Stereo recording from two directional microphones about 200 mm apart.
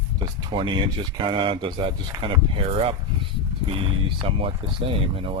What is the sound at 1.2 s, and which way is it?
Speech, 25° right (ahead or behind).